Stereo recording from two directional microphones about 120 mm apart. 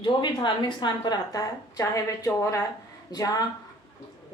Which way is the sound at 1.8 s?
25° left (ahead or behind).